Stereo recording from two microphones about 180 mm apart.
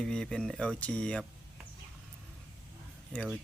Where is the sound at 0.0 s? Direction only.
5° left (ahead or behind).